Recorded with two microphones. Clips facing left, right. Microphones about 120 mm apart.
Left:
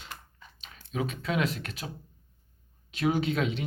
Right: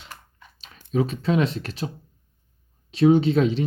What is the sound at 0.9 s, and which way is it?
Speech, 30° right (ahead or behind).